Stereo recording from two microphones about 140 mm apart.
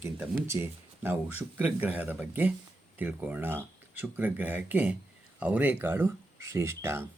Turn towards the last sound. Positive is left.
turn(degrees=-20)  # may be behind; listen again after turning